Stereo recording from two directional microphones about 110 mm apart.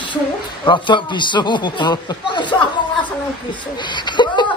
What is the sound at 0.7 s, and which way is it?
A man's voice, 50° left (ahead or behind).